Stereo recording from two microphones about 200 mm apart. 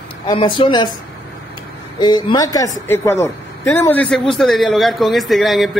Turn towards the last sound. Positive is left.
turn(degrees=0)  # may be behind; listen again after turning